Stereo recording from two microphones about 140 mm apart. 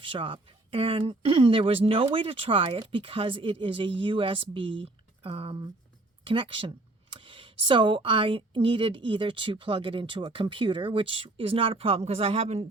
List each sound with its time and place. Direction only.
0.0 s speech: 40° right (ahead or behind)